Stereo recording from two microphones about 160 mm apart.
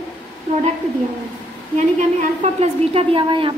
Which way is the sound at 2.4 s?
40° right (ahead or behind).